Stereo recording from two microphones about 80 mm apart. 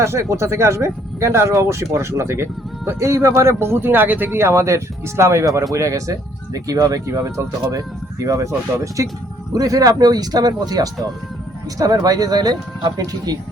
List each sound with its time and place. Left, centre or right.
0.0 s speech: right